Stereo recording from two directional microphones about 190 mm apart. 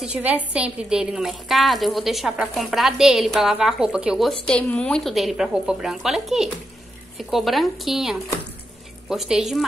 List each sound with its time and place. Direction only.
0.0 s a woman's voice: 10° right (ahead or behind)